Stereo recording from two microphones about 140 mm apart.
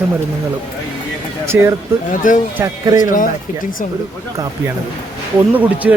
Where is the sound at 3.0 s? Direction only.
70° left (ahead or behind).